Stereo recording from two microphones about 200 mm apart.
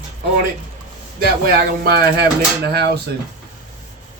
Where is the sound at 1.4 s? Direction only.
50° right (ahead or behind).